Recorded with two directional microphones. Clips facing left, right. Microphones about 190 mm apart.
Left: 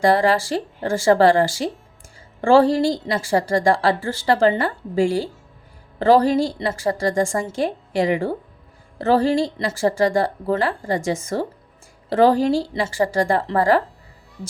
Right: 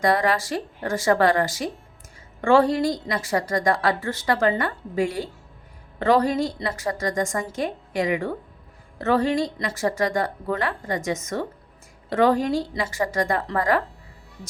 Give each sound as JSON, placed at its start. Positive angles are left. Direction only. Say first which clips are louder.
{"t": 0.0, "sound": "a woman's voice", "louder": "left 4 dB", "side_deg": 30}